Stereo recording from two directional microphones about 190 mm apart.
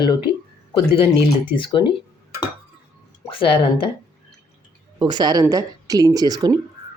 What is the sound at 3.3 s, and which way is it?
Speech, 30° left (ahead or behind).